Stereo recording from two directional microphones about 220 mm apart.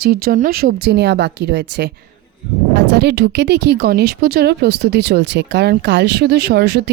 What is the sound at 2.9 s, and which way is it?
Speech, 50° right (ahead or behind).